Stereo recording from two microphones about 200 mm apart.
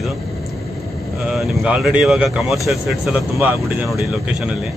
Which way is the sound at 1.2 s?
Centre (ahead or behind).